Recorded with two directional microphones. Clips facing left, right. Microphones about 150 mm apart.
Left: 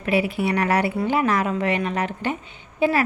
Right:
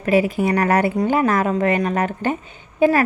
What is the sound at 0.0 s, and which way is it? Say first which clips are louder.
A woman's voice: right 4 dB; 40° right (ahead or behind).